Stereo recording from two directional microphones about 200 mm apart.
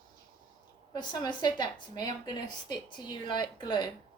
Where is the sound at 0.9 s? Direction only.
20° left (ahead or behind).